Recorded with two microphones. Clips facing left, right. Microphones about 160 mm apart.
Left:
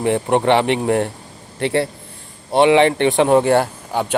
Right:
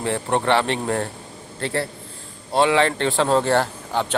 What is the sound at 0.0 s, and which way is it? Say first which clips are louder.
Speech: left 6 dB; 15° left (ahead or behind).